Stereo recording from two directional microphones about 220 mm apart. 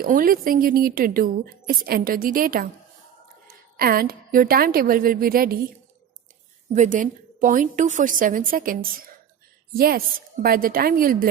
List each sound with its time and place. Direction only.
0.0 s a woman's voice: 40° right (ahead or behind)
6.7 s a woman's voice: 35° right (ahead or behind)